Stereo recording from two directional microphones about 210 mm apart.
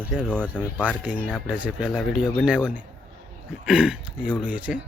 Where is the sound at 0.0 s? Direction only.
5° left (ahead or behind).